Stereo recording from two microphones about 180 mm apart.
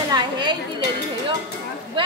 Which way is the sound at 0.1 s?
25° right (ahead or behind).